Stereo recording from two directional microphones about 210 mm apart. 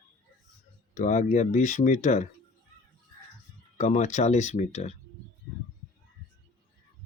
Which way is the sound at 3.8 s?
35° left (ahead or behind).